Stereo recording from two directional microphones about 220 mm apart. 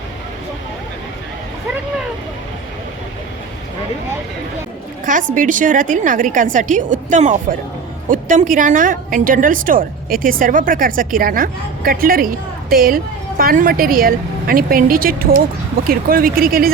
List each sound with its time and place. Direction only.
5.0 s a woman's voice: 35° right (ahead or behind)